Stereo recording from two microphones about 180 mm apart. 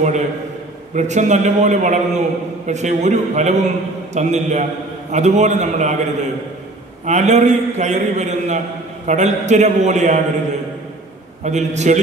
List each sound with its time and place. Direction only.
0.9 s a man's voice: 40° right (ahead or behind)
7.1 s a man's voice: 40° right (ahead or behind)
11.4 s a man's voice: 40° right (ahead or behind)